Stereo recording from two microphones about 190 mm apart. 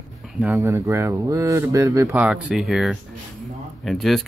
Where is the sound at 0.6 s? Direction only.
15° right (ahead or behind).